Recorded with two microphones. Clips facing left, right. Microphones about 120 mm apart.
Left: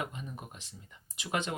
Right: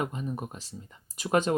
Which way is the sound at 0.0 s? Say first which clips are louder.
Right 7 dB; 45° right (ahead or behind).